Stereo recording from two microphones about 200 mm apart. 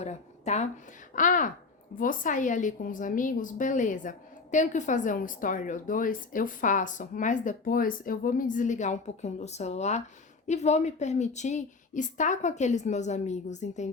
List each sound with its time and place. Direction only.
0.0 s a woman's voice: 35° left (ahead or behind)